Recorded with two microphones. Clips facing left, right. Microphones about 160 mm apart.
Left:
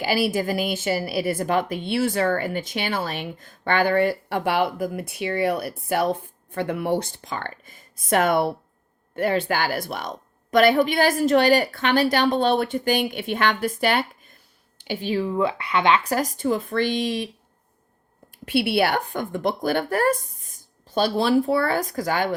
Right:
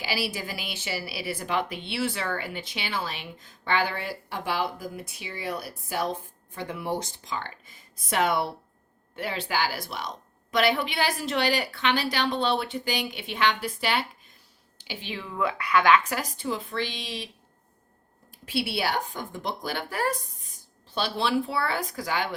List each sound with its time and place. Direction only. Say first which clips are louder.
0.0 s speech: left 9 dB; 50° left (ahead or behind); by 16.1 s 25° left (ahead or behind)
16.1 s speech: left 8 dB; 45° left (ahead or behind)
18.4 s a woman's voice: left 7 dB; 60° left (ahead or behind)